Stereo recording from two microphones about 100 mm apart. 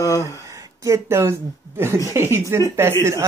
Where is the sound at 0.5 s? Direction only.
35° right (ahead or behind).